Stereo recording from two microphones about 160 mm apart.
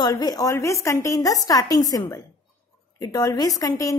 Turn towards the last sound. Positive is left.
turn(degrees=20)  # may be behind; listen again after turning